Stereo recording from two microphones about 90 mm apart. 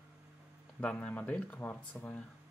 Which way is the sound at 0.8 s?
10° left (ahead or behind).